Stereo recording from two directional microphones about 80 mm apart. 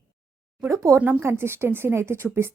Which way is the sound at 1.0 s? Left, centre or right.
Right.